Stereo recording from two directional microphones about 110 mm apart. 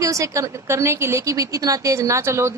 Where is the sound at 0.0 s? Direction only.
30° right (ahead or behind).